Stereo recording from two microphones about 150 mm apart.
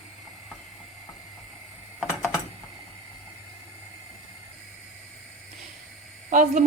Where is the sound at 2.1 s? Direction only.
20° left (ahead or behind).